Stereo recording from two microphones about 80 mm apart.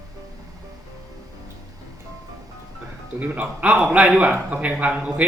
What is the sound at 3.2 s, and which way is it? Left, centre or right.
A man's voice, centre.